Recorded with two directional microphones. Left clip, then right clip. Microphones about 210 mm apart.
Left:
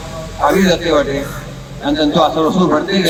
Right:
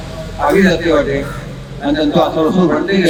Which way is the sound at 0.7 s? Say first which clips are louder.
Even; 35° left (ahead or behind).